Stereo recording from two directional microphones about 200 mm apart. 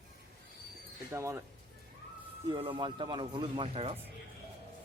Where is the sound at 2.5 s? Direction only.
25° right (ahead or behind).